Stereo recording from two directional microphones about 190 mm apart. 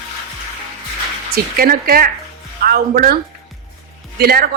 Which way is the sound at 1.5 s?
50° right (ahead or behind).